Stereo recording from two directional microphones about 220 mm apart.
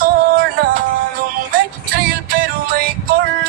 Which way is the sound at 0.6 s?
40° right (ahead or behind).